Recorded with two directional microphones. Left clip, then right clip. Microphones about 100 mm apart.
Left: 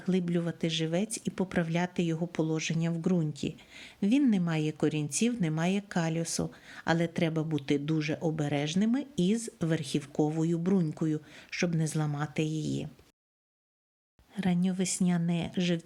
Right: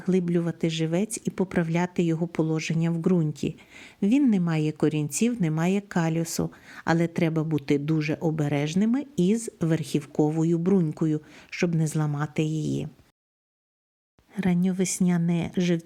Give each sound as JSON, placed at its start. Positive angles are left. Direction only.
{"t": 0.0, "sound": "speech", "side_deg": -35}
{"t": 14.3, "sound": "speech", "side_deg": -35}